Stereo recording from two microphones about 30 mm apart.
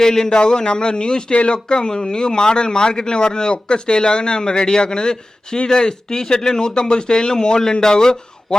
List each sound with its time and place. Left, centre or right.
0.0 s speech: centre